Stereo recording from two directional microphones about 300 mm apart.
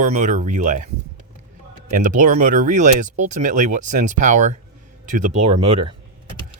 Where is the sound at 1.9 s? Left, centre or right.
Right.